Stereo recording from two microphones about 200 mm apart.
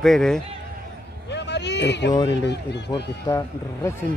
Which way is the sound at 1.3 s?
60° left (ahead or behind).